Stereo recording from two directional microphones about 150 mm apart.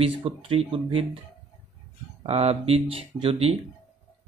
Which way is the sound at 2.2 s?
40° right (ahead or behind).